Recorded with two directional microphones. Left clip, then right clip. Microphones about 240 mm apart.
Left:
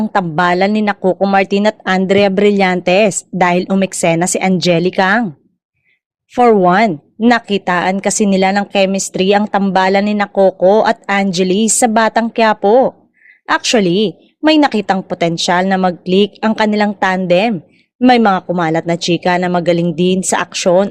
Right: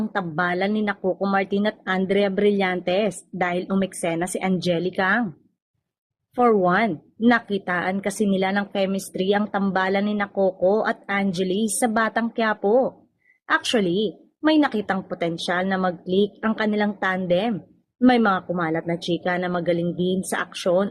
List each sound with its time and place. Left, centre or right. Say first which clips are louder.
0.0 s speech: left 11 dB; left
6.3 s speech: left 9 dB; left